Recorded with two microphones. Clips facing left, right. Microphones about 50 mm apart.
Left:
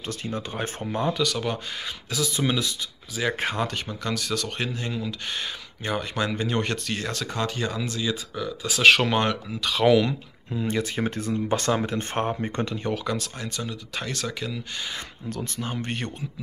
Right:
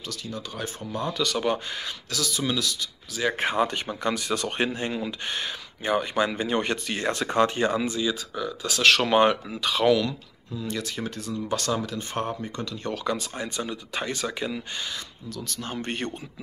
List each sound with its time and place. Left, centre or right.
0.0 s speech: left
1.1 s speech: centre
2.0 s speech: centre
3.2 s speech: centre; by 5.1 s right
5.3 s speech: centre
7.0 s speech: right
8.0 s speech: centre
9.1 s speech: centre
9.8 s speech: centre
10.5 s speech: left
13.0 s speech: centre
13.4 s speech: centre
15.2 s speech: left
15.6 s speech: centre